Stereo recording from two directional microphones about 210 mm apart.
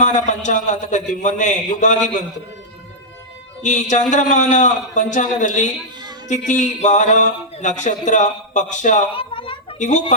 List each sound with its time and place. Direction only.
0.0 s speech: 35° left (ahead or behind)
3.6 s speech: 35° left (ahead or behind)
9.1 s a sound: 25° left (ahead or behind)